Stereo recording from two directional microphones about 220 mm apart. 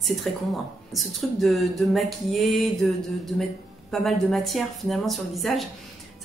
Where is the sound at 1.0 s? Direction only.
Centre (ahead or behind).